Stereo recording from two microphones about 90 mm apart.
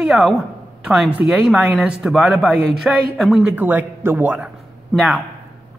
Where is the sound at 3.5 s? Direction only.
20° right (ahead or behind).